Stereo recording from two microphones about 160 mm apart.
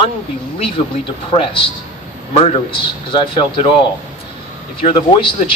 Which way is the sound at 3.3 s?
30° left (ahead or behind).